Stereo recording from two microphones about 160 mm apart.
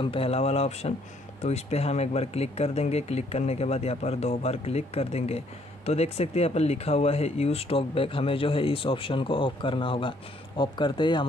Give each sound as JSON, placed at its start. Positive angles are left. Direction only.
{"t": 0.0, "sound": "speech", "side_deg": 35}